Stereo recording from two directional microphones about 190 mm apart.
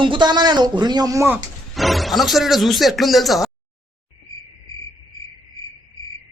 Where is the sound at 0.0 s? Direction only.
25° right (ahead or behind).